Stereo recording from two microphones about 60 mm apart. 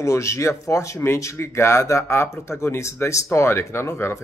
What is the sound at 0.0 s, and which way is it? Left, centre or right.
Speech, left.